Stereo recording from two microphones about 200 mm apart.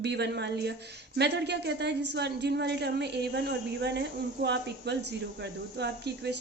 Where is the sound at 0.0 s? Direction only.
55° right (ahead or behind).